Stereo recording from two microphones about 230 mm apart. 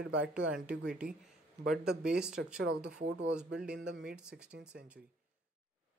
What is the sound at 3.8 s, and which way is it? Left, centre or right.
Speech, right.